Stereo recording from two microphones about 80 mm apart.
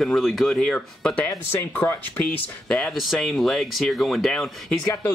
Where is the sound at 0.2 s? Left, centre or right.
Centre.